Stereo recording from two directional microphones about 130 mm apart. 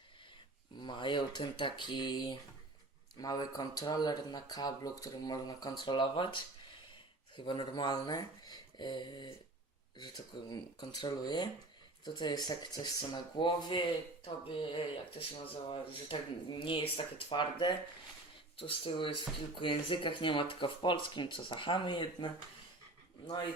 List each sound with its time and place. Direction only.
0.8 s speech: 35° left (ahead or behind)
10.5 s speech: 35° left (ahead or behind)